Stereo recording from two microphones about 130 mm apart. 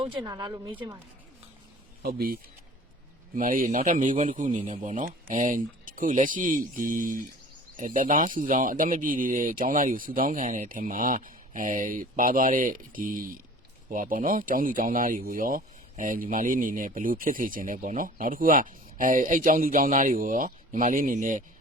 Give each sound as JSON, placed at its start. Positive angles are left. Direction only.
{"t": 0.0, "sound": "a woman's voice", "side_deg": -35}
{"t": 3.3, "sound": "speech", "side_deg": -90}